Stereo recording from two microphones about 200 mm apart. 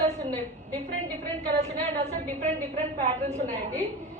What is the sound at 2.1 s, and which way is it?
Speech, 35° right (ahead or behind).